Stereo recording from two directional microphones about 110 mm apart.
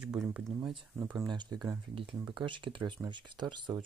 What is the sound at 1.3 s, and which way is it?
Speech, 40° right (ahead or behind).